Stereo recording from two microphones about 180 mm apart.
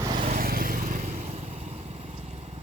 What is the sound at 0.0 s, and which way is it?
Vehicle, 30° right (ahead or behind).